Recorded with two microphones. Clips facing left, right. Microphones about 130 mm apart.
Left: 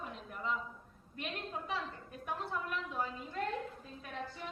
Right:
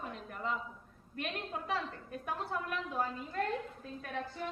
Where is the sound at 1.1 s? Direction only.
55° right (ahead or behind).